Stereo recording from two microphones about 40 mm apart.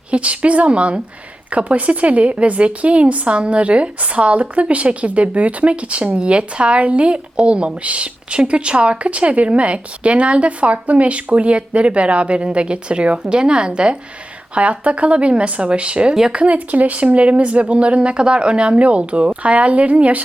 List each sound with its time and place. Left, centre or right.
0.1 s a woman's voice: right